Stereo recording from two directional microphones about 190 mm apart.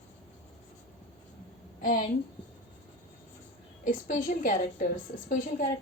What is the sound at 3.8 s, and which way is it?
A woman's voice, 45° left (ahead or behind).